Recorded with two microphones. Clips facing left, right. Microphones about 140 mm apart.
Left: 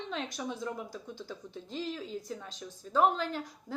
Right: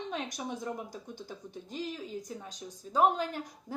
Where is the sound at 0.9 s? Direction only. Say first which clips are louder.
Left 1 dB; 15° right (ahead or behind).